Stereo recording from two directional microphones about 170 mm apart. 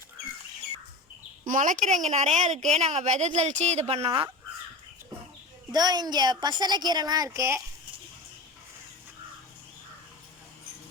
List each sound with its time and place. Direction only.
1.5 s speech: 50° right (ahead or behind); by 4.3 s 35° right (ahead or behind)
5.7 s a woman's voice: 25° right (ahead or behind)